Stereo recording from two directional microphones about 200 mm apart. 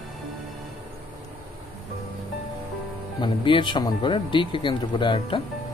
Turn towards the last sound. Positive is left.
turn(degrees=25)  # may be behind; listen again after turning